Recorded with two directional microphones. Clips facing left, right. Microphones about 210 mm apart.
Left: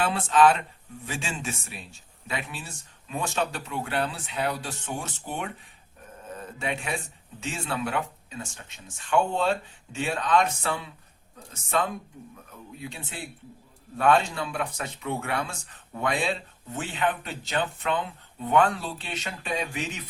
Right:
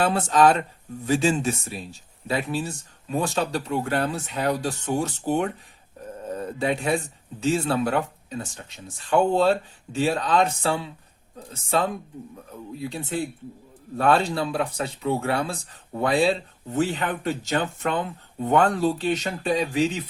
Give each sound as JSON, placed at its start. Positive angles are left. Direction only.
{"t": 0.0, "sound": "speech", "side_deg": -40}
{"t": 12.8, "sound": "speech", "side_deg": -40}